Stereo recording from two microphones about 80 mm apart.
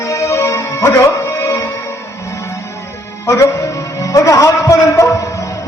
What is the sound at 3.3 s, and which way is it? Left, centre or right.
Music, left.